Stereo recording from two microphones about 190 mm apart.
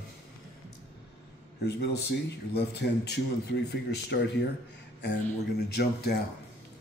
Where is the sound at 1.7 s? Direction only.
60° left (ahead or behind).